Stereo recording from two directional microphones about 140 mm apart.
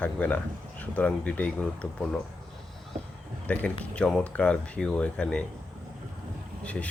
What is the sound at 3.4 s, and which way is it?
Speech, 10° left (ahead or behind).